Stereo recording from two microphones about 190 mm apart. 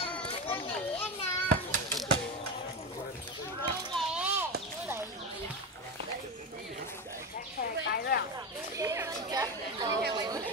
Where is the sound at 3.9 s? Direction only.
5° right (ahead or behind).